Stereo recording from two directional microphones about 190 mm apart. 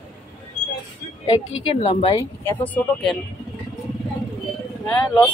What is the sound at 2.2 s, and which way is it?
Speech, 10° left (ahead or behind).